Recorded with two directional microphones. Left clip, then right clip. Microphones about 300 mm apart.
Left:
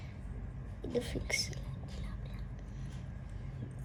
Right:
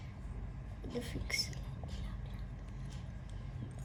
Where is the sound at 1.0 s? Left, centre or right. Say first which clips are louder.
Left 2 dB; left.